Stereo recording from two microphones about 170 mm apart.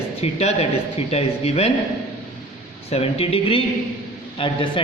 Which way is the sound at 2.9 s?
35° left (ahead or behind).